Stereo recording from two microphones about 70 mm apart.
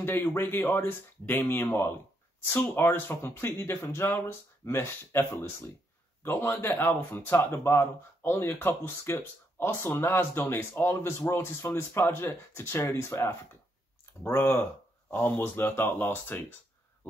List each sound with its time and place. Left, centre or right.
0.0 s speech: left